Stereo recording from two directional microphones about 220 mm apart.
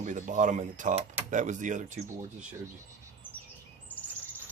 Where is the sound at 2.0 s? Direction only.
5° right (ahead or behind).